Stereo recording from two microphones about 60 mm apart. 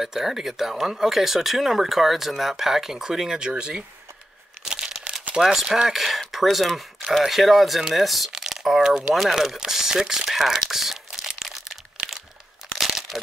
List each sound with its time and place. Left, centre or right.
0.0 s speech: centre
4.6 s crumpling: centre
5.2 s a sound: centre
5.5 s speech: centre
9.1 s crumpling: centre
12.7 s crushing: centre